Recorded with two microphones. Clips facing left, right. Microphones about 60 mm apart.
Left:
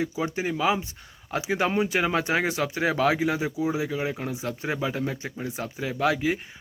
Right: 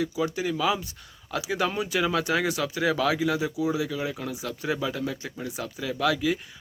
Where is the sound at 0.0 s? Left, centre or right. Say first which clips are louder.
Even; left.